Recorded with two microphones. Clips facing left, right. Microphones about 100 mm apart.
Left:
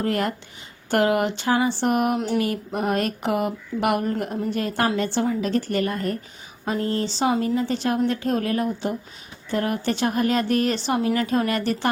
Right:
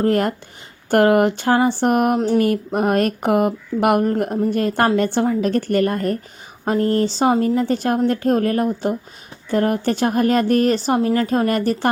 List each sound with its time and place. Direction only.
0.0 s speech: 45° right (ahead or behind)